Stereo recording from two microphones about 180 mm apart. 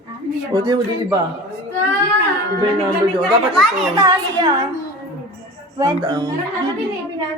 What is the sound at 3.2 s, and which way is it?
Speech, centre (ahead or behind).